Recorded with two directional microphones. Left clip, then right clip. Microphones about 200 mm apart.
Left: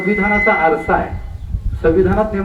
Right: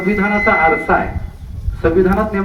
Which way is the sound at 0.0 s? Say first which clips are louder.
Left 1 dB; 15° right (ahead or behind).